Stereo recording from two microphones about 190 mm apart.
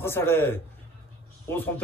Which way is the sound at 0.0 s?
10° left (ahead or behind).